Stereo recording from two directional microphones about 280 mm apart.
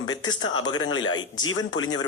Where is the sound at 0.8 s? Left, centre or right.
Left.